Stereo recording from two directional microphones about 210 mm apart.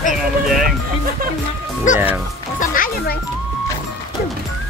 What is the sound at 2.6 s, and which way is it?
Music, 40° left (ahead or behind).